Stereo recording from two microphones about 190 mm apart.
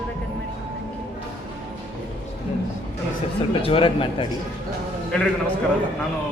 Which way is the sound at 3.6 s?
30° left (ahead or behind).